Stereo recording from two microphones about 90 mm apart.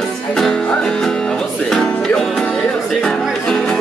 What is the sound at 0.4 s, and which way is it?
Music, 5° left (ahead or behind).